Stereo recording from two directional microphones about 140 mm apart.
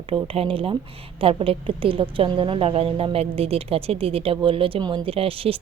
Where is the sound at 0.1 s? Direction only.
40° right (ahead or behind).